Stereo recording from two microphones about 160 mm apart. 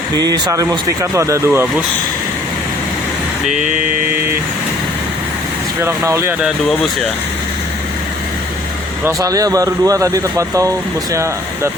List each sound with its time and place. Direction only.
0.2 s speech: 25° right (ahead or behind)
5.8 s speech: 15° right (ahead or behind)
9.0 s speech: 20° right (ahead or behind)